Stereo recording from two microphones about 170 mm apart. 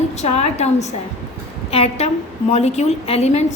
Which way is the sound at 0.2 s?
40° left (ahead or behind).